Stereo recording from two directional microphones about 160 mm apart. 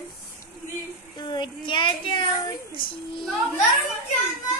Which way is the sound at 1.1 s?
30° left (ahead or behind).